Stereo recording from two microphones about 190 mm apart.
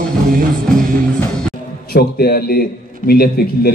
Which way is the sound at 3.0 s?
55° left (ahead or behind).